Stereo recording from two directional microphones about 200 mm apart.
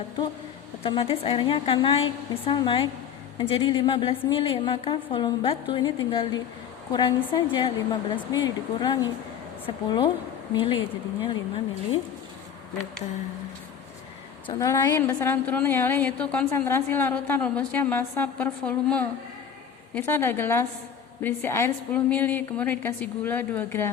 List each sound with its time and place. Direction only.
0.8 s a woman's voice: 25° left (ahead or behind)
14.4 s a woman's voice: 15° left (ahead or behind)